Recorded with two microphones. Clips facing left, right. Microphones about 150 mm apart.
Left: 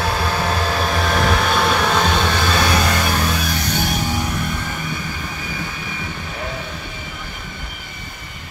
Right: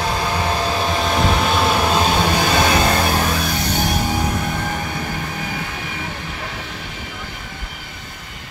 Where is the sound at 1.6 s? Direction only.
10° right (ahead or behind).